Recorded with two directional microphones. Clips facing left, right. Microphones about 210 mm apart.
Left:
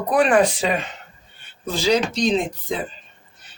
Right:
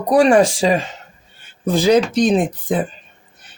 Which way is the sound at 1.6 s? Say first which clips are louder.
Right 6 dB; 50° right (ahead or behind).